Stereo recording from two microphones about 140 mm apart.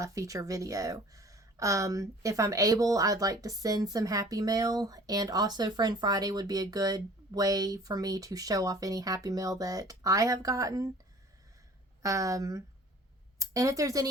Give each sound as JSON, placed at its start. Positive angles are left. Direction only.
{"t": 0.0, "sound": "speech", "side_deg": -25}
{"t": 12.0, "sound": "speech", "side_deg": -25}